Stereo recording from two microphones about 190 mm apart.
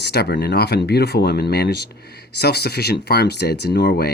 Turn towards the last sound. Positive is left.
turn(degrees=60)  # may be behind; listen again after turning